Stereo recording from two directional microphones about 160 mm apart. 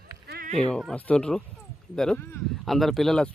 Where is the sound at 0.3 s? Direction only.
85° right.